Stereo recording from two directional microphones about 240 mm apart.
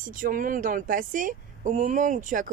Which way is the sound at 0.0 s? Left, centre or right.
Right.